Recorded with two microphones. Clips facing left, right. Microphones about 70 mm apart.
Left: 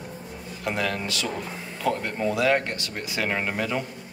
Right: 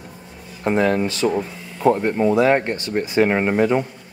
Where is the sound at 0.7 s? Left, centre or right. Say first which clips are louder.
Right 9 dB; right.